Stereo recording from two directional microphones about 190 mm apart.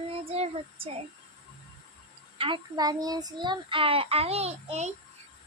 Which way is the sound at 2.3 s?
25° right (ahead or behind).